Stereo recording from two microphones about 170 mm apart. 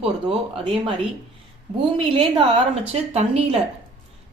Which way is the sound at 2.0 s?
35° right (ahead or behind).